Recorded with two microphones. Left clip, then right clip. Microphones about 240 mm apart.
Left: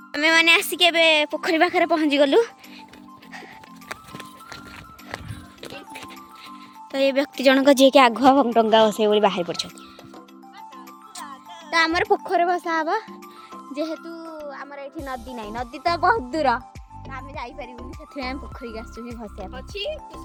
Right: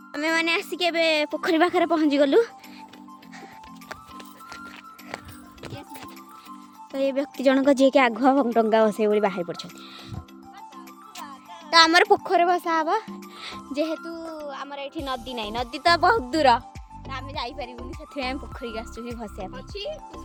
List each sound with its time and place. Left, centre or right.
0.1 s a woman's voice: centre
6.9 s a woman's voice: centre
11.7 s a woman's voice: centre
13.8 s a sound: centre
14.9 s a woman's voice: centre
19.5 s speech: left